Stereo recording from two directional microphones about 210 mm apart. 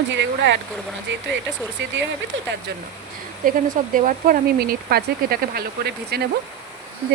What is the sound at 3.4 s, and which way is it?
Speech, 40° right (ahead or behind).